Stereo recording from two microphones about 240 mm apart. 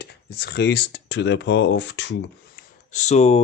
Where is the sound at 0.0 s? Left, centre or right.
Left.